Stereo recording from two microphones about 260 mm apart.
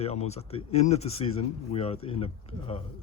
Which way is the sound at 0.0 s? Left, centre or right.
Left.